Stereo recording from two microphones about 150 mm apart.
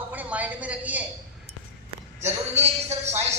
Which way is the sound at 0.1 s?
10° right (ahead or behind).